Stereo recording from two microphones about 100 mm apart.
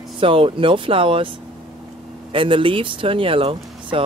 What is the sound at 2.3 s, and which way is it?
Speech, 60° right (ahead or behind).